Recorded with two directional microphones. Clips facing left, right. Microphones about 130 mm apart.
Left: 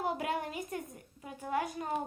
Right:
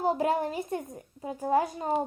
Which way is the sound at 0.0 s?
35° right (ahead or behind).